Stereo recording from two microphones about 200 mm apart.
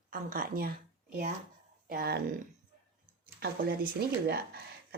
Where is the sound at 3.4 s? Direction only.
50° right (ahead or behind).